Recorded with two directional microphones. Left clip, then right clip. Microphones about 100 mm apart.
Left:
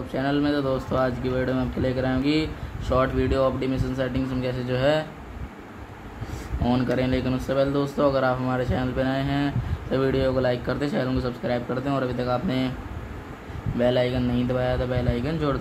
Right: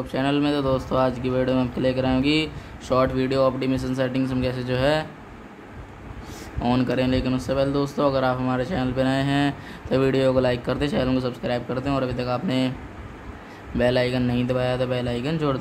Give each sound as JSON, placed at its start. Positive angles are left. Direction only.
{"t": 0.1, "sound": "speech", "side_deg": -30}
{"t": 6.6, "sound": "speech", "side_deg": -35}
{"t": 9.0, "sound": "speech", "side_deg": -40}
{"t": 13.7, "sound": "speech", "side_deg": -30}